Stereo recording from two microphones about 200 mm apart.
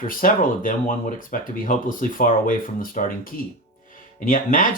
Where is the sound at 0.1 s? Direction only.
45° left (ahead or behind).